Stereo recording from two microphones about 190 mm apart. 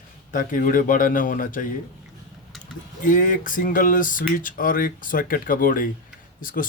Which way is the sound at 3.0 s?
45° left (ahead or behind).